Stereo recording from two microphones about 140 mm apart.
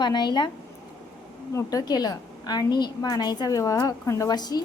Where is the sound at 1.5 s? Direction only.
30° left (ahead or behind).